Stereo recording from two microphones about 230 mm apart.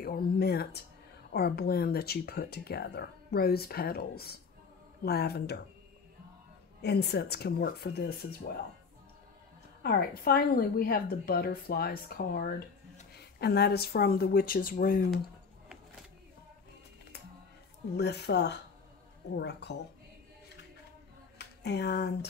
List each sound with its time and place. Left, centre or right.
0.0 s speech: left
6.8 s speech: left
9.8 s a woman's voice: left
17.9 s speech: left
21.4 s a sound: left